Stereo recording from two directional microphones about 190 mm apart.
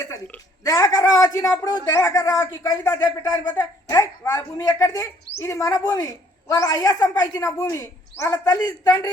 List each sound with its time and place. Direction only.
0.0 s a man's voice: 15° left (ahead or behind)